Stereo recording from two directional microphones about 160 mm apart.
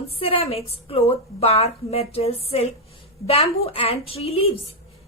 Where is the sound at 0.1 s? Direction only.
35° left (ahead or behind).